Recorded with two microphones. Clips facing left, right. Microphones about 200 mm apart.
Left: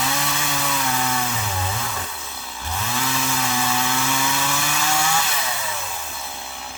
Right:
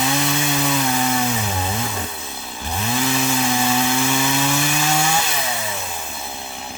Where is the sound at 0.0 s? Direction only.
20° right (ahead or behind).